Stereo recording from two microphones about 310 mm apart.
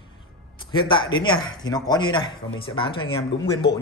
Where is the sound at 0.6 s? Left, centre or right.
Centre.